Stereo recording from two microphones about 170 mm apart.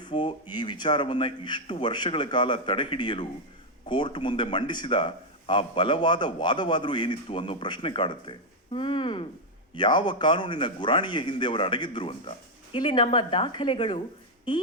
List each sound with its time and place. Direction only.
0.1 s a man's voice: 30° left (ahead or behind)